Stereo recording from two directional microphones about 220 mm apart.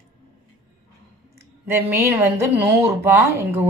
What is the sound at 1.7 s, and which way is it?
A woman's voice, 10° right (ahead or behind).